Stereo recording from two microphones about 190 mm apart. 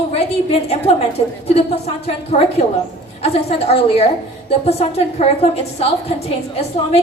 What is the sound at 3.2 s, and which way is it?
A woman's voice, 30° left (ahead or behind).